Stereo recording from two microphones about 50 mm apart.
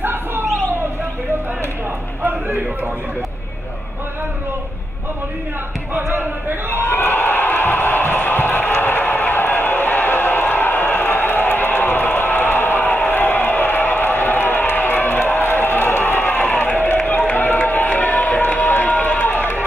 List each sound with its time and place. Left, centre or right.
0.0 s a sound: right
6.7 s a sound: left
16.4 s crowd: left
16.7 s run: left
17.6 s crowd: left
18.6 s run: left